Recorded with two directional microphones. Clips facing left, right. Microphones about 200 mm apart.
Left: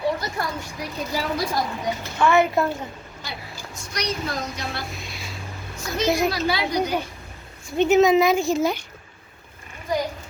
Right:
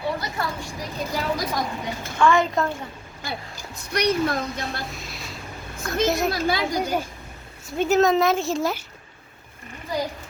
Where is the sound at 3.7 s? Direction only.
60° right (ahead or behind).